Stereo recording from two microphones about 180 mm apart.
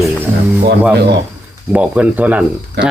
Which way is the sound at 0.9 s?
65° right (ahead or behind).